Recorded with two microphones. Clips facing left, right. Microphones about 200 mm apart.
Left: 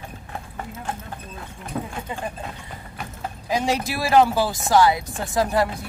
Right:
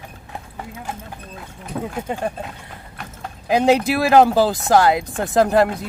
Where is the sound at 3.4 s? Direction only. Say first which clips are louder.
Right 7 dB; 60° right (ahead or behind).